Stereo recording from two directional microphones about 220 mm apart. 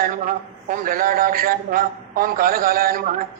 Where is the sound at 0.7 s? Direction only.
40° right (ahead or behind).